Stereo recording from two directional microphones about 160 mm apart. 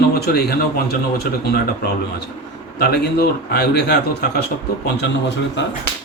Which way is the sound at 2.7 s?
90° left.